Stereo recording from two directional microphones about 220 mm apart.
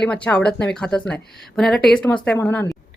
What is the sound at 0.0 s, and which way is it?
A woman's voice, 5° left (ahead or behind).